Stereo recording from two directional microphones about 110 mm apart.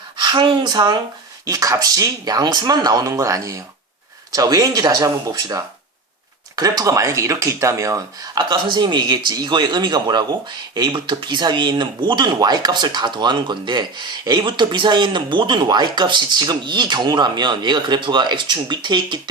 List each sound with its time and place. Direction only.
0.2 s speech: 40° right (ahead or behind)
1.5 s speech: 30° right (ahead or behind)